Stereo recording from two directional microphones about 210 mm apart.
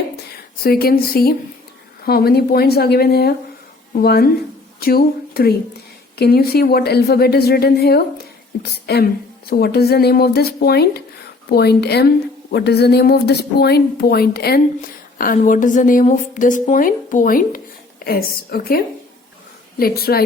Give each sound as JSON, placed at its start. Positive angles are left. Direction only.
{"t": 0.6, "sound": "a woman's voice", "side_deg": 45}
{"t": 19.8, "sound": "a woman's voice", "side_deg": 45}